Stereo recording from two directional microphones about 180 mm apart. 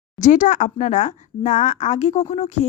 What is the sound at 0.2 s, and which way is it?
Speech, 45° left (ahead or behind).